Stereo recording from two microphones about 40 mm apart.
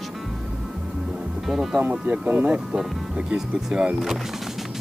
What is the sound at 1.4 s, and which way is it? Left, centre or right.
Speech, centre.